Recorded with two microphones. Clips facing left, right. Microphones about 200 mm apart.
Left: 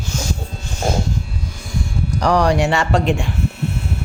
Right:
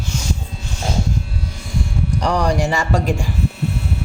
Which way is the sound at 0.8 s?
50° left (ahead or behind).